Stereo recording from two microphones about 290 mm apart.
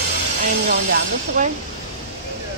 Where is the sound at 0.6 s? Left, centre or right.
Right.